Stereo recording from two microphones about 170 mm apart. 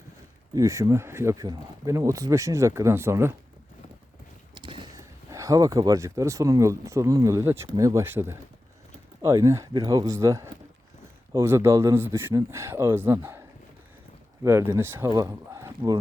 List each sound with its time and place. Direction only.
0.5 s speech: 20° right (ahead or behind)
4.5 s speech: 25° right (ahead or behind)
14.4 s speech: 15° right (ahead or behind)